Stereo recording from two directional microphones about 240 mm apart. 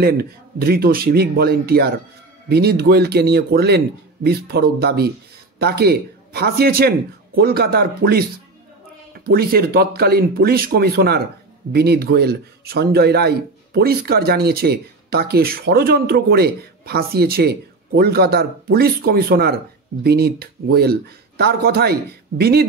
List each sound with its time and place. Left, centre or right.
0.0 s speech: right